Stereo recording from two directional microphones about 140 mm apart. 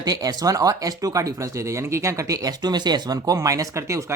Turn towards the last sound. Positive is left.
turn(degrees=-20)  # may be behind; listen again after turning